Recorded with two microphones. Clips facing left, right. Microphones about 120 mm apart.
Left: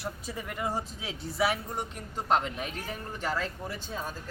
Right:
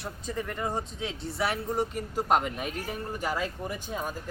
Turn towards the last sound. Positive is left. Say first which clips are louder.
# right 3 dB
turn(degrees=-15)  # may be behind; listen again after turning